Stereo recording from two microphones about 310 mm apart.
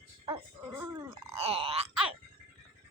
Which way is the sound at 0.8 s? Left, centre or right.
Centre.